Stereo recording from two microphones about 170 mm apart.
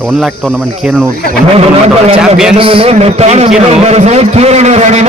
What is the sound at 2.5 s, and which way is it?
A man's voice, 30° right (ahead or behind).